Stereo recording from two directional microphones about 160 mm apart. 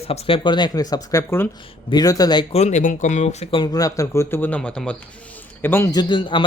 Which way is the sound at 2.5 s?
45° left (ahead or behind).